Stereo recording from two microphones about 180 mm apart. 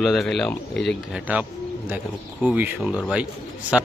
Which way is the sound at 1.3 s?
10° right (ahead or behind).